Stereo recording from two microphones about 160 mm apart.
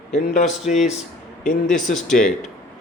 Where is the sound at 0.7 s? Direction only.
55° left (ahead or behind).